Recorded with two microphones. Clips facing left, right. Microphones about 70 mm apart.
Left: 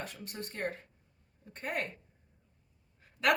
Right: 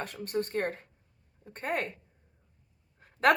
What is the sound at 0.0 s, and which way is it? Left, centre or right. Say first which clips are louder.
Speech: right 9 dB; right.